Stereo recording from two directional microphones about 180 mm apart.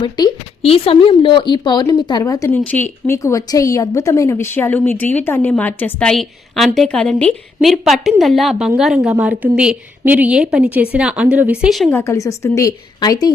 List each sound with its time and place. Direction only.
0.0 s a woman's voice: 25° left (ahead or behind); by 11.9 s 5° right (ahead or behind)
11.9 s a woman's voice: 15° left (ahead or behind)